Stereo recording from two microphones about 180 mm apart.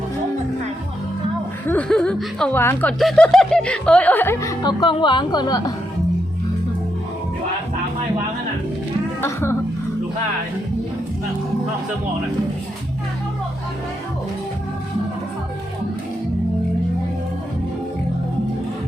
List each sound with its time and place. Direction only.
1.6 s speech: 5° left (ahead or behind)
4.6 s speech: 25° left (ahead or behind)
9.2 s speech: 15° left (ahead or behind)